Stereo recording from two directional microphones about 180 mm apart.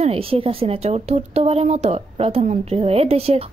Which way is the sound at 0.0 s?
30° right (ahead or behind).